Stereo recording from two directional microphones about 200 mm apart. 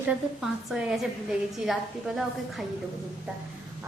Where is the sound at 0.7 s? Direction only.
5° right (ahead or behind).